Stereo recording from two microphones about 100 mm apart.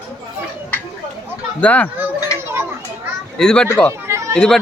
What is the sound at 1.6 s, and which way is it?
Speech, 15° left (ahead or behind).